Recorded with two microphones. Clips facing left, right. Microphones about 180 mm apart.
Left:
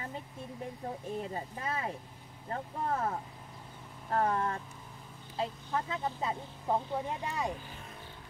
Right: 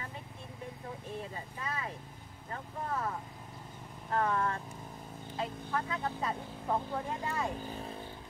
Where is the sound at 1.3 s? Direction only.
45° left (ahead or behind); by 7.5 s 15° left (ahead or behind).